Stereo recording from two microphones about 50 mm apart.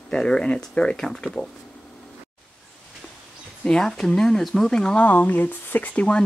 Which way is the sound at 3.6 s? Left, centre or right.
Centre.